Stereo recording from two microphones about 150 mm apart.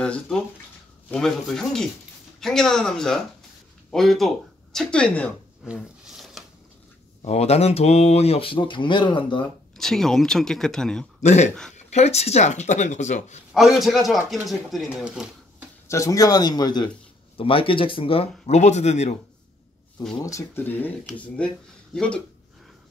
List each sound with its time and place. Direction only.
0.0 s speech: 5° left (ahead or behind)
5.7 s roaring cats: centre (ahead or behind)
7.2 s speech: 45° left (ahead or behind)
9.8 s speech: centre (ahead or behind)
11.2 s speech: 50° left (ahead or behind)
13.5 s speech: centre (ahead or behind)
15.9 s speech: 20° left (ahead or behind); by 18.3 s 40° left (ahead or behind)
18.5 s speech: 50° left (ahead or behind)
20.2 s speech: 20° left (ahead or behind)
21.9 s speech: 5° left (ahead or behind)